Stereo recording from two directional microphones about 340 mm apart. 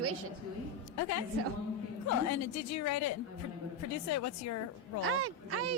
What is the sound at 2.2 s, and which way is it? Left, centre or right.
A woman's voice, left.